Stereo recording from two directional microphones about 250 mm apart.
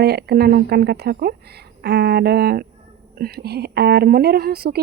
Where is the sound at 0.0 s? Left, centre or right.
Right.